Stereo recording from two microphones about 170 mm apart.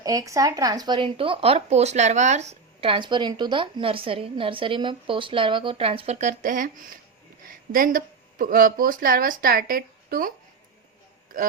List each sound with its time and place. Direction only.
0.0 s speech: 20° right (ahead or behind); by 10.3 s 55° right (ahead or behind)